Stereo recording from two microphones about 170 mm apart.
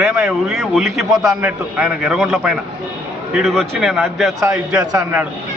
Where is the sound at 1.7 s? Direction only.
5° right (ahead or behind).